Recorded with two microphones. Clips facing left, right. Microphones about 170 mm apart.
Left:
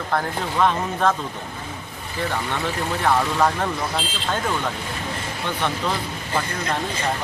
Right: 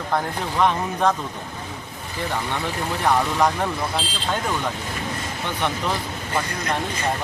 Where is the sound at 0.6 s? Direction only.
15° right (ahead or behind).